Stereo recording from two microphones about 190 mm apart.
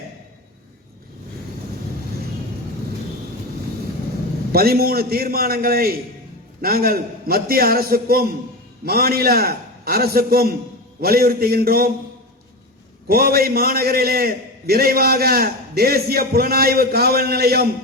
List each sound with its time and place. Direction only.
4.5 s a man's voice: 55° right (ahead or behind)
13.1 s a man's voice: 50° right (ahead or behind)